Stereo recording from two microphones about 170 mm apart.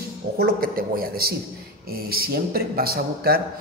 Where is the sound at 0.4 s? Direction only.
60° right (ahead or behind).